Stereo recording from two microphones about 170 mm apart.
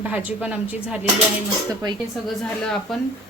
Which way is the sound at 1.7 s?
25° right (ahead or behind).